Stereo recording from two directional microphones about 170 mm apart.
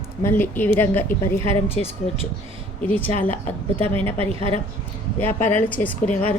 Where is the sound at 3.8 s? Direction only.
35° right (ahead or behind).